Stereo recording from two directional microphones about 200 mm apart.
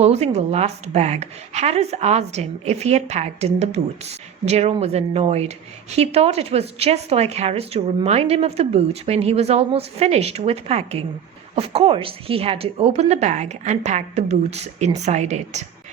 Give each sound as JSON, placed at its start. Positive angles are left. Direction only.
{"t": 0.0, "sound": "a woman's voice", "side_deg": -30}